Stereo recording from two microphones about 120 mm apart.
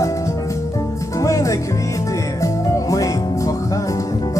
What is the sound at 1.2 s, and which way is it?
Music, 25° left (ahead or behind).